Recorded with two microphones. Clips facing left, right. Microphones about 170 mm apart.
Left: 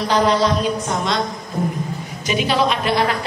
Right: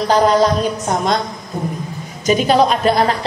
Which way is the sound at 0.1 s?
45° right (ahead or behind).